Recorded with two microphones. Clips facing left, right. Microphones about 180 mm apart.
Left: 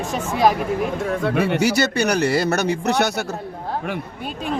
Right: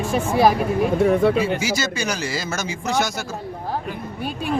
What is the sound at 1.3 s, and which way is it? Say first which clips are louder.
Speech: left 3 dB; 65° left (ahead or behind).